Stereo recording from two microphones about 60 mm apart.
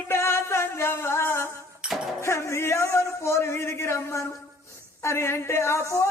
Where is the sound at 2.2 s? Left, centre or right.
Left.